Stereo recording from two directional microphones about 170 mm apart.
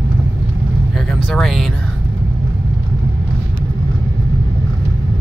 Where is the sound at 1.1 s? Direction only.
Centre (ahead or behind).